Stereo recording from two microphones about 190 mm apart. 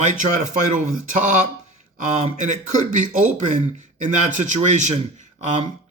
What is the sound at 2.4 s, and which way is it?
A man's voice, 40° right (ahead or behind).